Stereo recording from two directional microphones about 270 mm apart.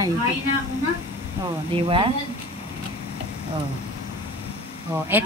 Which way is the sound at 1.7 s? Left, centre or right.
Centre.